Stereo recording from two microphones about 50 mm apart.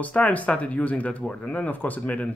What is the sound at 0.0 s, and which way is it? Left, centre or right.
Speech, left.